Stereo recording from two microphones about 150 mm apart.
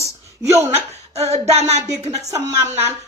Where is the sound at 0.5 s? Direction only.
45° right (ahead or behind).